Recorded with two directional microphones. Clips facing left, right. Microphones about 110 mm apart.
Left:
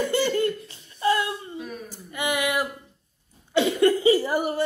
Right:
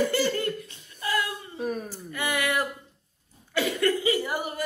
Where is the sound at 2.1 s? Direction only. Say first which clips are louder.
Left 2 dB; 15° left (ahead or behind).